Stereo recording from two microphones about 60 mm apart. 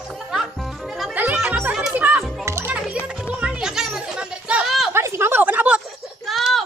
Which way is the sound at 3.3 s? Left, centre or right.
Centre.